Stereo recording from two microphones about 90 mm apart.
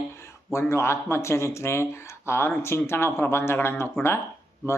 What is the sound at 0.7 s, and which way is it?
Speech, 30° left (ahead or behind).